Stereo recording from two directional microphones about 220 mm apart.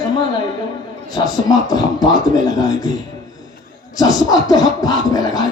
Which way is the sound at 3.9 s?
15° left (ahead or behind).